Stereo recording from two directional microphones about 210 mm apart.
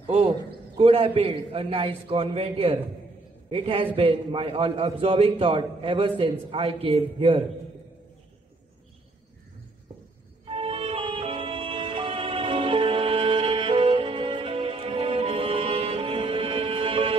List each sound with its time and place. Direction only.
0.0 s a man's voice: 25° right (ahead or behind)
10.5 s music: 30° right (ahead or behind)